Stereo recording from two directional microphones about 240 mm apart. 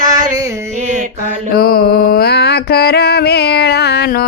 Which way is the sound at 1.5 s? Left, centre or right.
Left.